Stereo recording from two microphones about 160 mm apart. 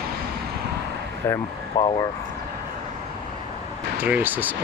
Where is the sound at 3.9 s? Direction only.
10° right (ahead or behind).